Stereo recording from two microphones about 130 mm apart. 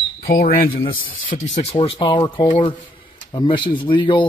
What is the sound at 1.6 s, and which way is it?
Speech, 50° left (ahead or behind).